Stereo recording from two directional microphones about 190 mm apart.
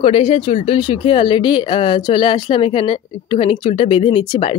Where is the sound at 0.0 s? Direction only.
30° left (ahead or behind).